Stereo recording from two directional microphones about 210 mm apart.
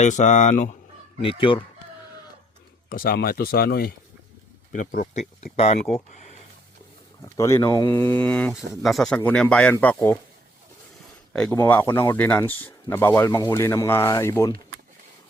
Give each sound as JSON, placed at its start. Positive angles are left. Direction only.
{"t": 0.0, "sound": "speech", "side_deg": 35}
{"t": 1.2, "sound": "speech", "side_deg": 25}
{"t": 2.9, "sound": "speech", "side_deg": 45}
{"t": 7.2, "sound": "speech", "side_deg": 15}
{"t": 11.5, "sound": "speech", "side_deg": 10}